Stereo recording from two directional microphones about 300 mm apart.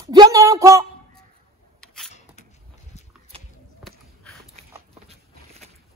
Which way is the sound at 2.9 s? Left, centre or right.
Left.